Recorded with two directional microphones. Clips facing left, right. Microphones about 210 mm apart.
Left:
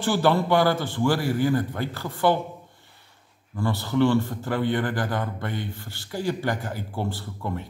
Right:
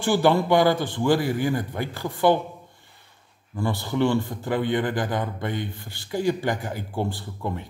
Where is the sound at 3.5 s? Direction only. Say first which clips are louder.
Left 1 dB; 15° right (ahead or behind).